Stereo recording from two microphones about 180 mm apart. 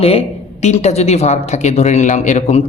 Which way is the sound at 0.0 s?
35° left (ahead or behind).